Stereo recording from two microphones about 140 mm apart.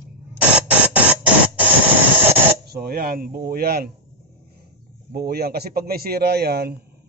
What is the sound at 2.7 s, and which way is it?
Speech, 90° right.